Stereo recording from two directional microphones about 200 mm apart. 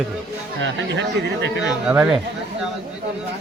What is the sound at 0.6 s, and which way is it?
Speech, 65° right (ahead or behind).